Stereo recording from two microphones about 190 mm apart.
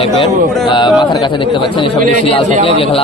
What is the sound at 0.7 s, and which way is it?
A man's voice, 25° left (ahead or behind).